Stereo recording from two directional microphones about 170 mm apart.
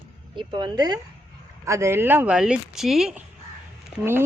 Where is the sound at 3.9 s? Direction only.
10° right (ahead or behind).